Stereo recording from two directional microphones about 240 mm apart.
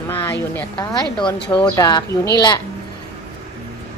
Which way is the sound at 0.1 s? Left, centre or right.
Centre.